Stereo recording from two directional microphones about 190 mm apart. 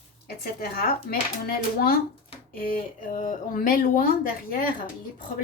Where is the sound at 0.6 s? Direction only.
50° left (ahead or behind).